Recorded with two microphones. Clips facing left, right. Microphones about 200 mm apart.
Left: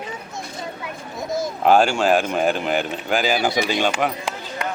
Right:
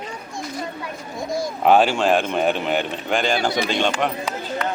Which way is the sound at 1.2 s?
20° left (ahead or behind).